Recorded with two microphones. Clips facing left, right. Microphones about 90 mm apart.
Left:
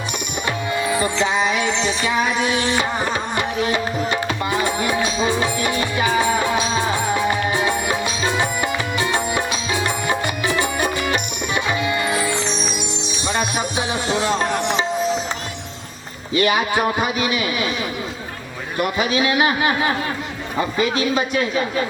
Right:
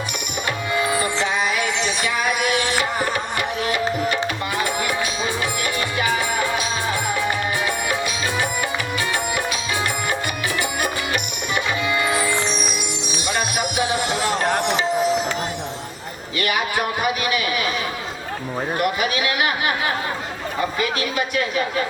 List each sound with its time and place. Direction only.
0.9 s music: 25° left (ahead or behind)
10.6 s music: 25° left (ahead or behind)
13.7 s music: 25° left (ahead or behind)
16.3 s a man's voice: 25° left (ahead or behind)
18.8 s a man's voice: 25° left (ahead or behind)